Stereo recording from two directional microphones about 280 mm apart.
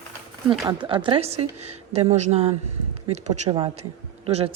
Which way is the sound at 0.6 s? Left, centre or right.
Centre.